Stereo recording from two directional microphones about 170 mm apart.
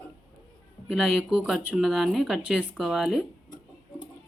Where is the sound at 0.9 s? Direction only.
Centre (ahead or behind).